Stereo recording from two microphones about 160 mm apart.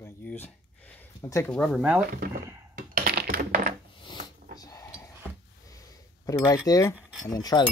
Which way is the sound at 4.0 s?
30° left (ahead or behind).